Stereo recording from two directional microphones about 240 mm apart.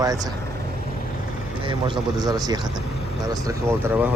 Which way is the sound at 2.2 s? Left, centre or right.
Centre.